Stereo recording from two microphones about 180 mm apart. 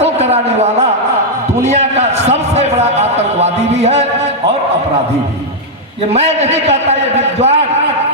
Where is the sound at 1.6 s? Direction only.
40° right (ahead or behind).